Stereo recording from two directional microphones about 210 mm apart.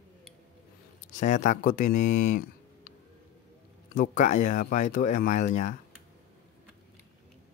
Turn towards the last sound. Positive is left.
turn(degrees=35)  # may be behind; listen again after turning